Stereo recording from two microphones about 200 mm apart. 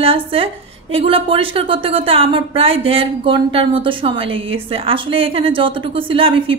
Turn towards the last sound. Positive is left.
turn(degrees=-25)  # may be behind; listen again after turning